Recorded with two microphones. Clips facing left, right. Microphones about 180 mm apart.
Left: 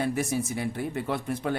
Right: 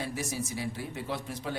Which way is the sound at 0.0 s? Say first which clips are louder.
Left 7 dB; 55° left (ahead or behind).